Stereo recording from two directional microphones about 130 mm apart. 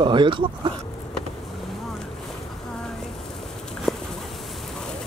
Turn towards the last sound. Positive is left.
turn(degrees=5)  # may be behind; listen again after turning